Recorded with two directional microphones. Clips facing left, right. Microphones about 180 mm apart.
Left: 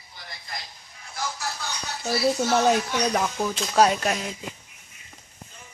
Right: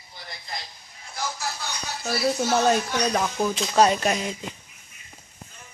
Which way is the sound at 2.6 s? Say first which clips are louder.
Even; 10° left (ahead or behind).